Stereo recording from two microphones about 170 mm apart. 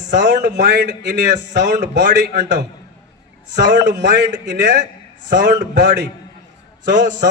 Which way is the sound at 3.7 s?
90° right.